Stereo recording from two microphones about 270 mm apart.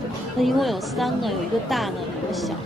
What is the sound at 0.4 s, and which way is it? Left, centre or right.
Speech, centre.